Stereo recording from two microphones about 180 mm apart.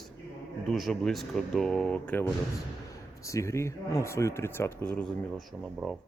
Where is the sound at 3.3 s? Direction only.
15° left (ahead or behind).